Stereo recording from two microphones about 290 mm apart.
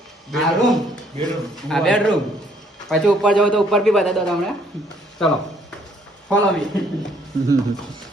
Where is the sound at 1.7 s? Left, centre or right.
Centre.